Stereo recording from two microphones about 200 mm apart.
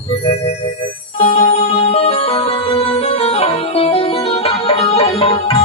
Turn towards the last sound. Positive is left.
turn(degrees=30)  # may be behind; listen again after turning